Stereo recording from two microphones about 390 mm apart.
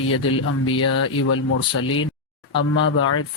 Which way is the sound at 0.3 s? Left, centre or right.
Left.